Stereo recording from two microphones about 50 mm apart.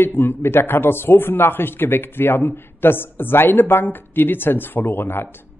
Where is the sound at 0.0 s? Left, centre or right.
Left.